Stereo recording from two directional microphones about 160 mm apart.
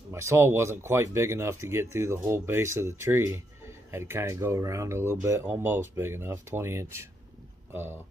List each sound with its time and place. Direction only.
0.1 s speech: 15° right (ahead or behind)